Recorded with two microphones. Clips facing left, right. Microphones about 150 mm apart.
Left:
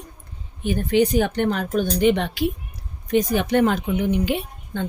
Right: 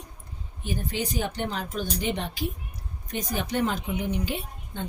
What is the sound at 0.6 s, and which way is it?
A woman's voice, 65° left (ahead or behind).